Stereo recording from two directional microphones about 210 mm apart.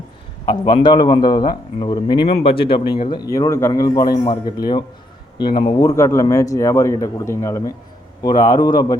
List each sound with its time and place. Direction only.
0.4 s a man's voice: 20° left (ahead or behind)